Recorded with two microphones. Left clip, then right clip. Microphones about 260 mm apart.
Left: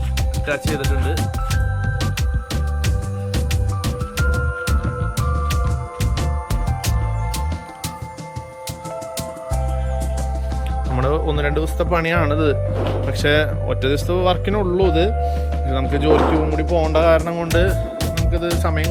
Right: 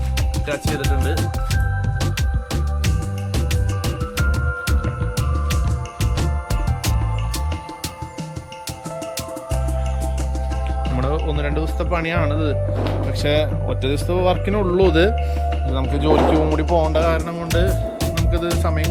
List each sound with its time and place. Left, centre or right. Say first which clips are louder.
0.2 s music: left 2 dB; centre
4.2 s music: left 2 dB; centre
10.9 s speech: left 5 dB; centre
16.9 s music: left 4 dB; centre
18.1 s speech: left 1 dB; centre